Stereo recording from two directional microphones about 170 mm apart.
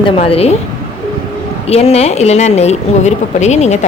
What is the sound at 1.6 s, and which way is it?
A woman's voice, 40° left (ahead or behind).